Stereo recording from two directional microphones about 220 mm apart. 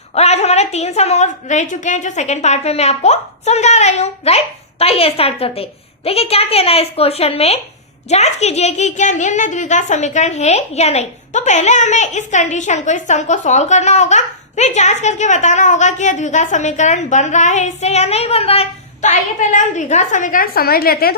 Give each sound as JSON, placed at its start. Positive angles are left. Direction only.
{"t": 0.1, "sound": "a woman's voice", "side_deg": 30}